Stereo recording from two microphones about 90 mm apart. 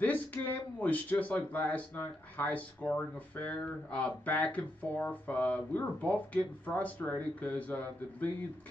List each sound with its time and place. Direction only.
0.0 s speech: 20° left (ahead or behind)